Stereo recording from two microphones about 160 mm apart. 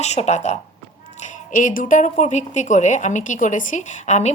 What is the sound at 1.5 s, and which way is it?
A woman's voice, 55° left (ahead or behind).